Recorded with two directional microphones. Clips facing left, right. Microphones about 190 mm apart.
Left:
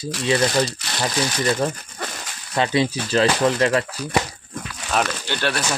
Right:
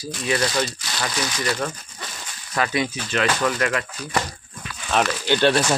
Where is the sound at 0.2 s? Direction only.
25° left (ahead or behind).